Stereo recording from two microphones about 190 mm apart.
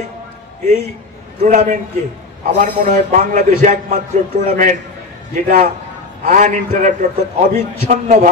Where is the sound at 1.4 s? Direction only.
40° right (ahead or behind).